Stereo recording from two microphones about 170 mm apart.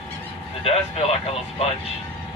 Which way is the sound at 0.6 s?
35° left (ahead or behind).